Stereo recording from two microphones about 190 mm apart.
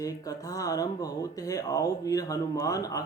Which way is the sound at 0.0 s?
20° left (ahead or behind).